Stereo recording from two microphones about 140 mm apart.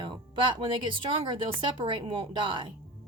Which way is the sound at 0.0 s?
35° right (ahead or behind).